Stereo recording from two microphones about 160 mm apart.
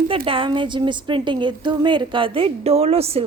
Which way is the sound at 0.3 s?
30° right (ahead or behind).